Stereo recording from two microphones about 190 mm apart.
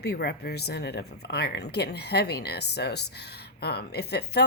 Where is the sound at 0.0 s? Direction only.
60° left (ahead or behind).